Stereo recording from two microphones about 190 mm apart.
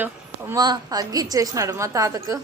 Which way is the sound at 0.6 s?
20° right (ahead or behind).